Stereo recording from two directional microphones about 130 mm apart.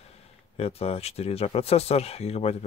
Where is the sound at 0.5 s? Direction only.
50° left (ahead or behind).